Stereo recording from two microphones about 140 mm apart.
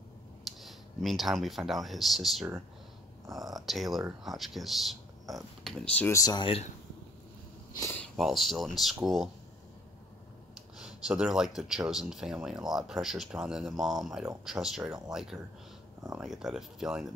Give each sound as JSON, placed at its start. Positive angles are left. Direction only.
{"t": 0.5, "sound": "speech", "side_deg": 0}
{"t": 3.5, "sound": "speech", "side_deg": 0}
{"t": 6.0, "sound": "speech", "side_deg": 25}
{"t": 8.2, "sound": "speech", "side_deg": 0}
{"t": 10.8, "sound": "speech", "side_deg": -5}